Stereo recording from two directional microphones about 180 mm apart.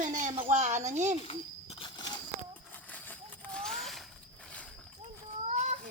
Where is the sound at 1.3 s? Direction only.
30° left (ahead or behind).